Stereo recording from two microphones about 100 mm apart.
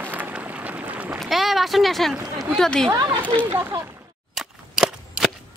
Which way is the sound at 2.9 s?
35° right (ahead or behind).